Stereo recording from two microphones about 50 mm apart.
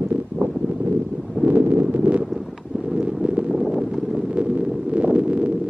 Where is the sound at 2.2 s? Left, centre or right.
Centre.